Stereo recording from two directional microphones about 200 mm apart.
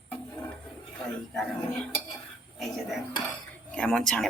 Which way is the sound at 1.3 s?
Centre (ahead or behind).